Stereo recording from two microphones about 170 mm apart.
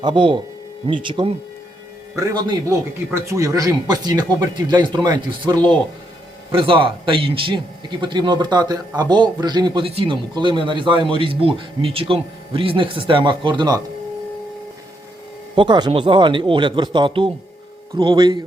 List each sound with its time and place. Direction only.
0.0 s speech: 30° right (ahead or behind)
15.5 s speech: 25° right (ahead or behind)